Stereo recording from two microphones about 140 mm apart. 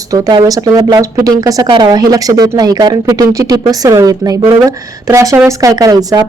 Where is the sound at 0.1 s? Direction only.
25° right (ahead or behind).